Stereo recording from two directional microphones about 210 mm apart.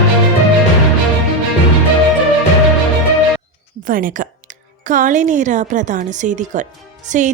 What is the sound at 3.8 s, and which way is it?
A woman's voice, 40° right (ahead or behind).